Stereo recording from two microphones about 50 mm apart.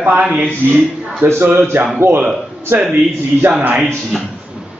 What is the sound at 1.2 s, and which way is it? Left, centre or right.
Speech, right.